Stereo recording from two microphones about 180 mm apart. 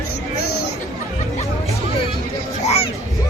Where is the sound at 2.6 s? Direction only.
35° left (ahead or behind).